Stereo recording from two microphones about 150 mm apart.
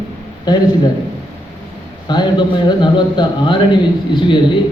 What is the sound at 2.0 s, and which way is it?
A man's voice, 30° left (ahead or behind).